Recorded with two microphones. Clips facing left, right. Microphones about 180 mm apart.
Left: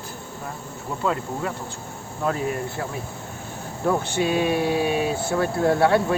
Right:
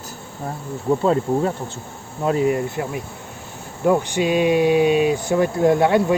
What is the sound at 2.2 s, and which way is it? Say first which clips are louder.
Speech: right 6 dB; 20° right (ahead or behind).